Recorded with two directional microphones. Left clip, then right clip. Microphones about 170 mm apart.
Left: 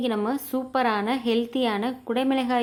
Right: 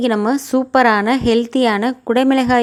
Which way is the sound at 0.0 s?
35° right (ahead or behind).